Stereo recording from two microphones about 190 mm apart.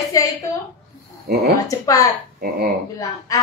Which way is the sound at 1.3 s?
50° right (ahead or behind).